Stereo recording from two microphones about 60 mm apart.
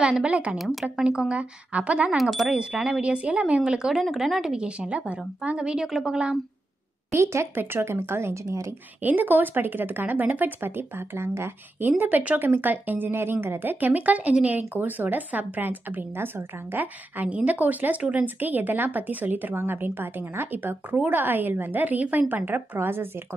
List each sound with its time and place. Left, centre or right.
0.0 s a woman's voice: centre
2.1 s speech: centre
2.6 s a woman's voice: centre
7.5 s a woman's voice: right
8.5 s speech: right
9.0 s a woman's voice: right
12.0 s a woman's voice: right
19.5 s a woman's voice: right